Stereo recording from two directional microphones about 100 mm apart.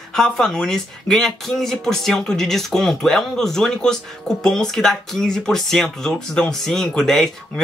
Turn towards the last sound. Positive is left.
turn(degrees=5)  # may be behind; listen again after turning